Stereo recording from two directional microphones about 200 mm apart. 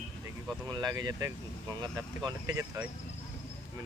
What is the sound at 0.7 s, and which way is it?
Speech, 20° right (ahead or behind).